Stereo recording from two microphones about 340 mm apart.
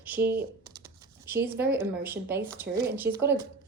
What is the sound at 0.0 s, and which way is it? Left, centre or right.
Speech, centre.